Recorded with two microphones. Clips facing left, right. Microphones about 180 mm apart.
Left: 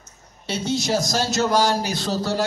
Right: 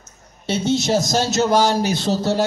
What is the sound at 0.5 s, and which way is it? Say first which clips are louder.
A man's voice: right 4 dB; 25° right (ahead or behind).